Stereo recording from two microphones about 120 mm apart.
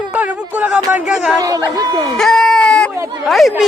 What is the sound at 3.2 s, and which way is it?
Speech, centre (ahead or behind).